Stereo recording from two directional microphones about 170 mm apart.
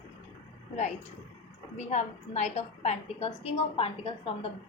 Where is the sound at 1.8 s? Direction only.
40° left (ahead or behind).